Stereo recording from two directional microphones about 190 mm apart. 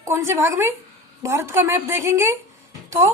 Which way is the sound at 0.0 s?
15° right (ahead or behind).